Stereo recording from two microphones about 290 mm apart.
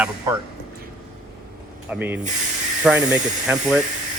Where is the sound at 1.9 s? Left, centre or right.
Centre.